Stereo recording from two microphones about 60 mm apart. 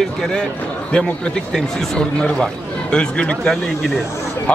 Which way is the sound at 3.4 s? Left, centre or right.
Centre.